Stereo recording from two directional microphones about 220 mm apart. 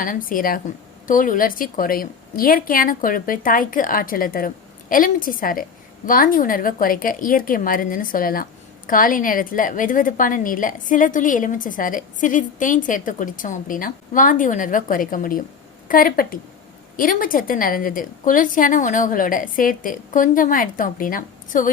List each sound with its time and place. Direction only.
0.0 s a woman's voice: 40° left (ahead or behind)